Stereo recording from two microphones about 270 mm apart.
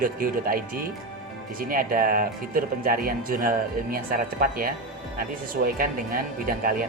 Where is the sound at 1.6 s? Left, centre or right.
Right.